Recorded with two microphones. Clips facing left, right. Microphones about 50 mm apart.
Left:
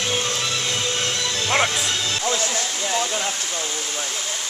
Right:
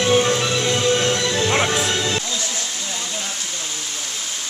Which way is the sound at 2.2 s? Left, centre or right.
Left.